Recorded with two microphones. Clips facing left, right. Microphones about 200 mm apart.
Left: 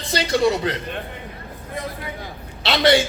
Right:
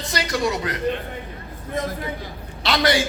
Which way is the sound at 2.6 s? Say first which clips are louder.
Left 3 dB; 25° left (ahead or behind).